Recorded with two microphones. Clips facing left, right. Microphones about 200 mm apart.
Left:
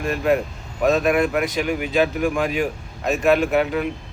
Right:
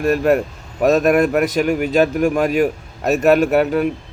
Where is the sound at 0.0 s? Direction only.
45° right (ahead or behind).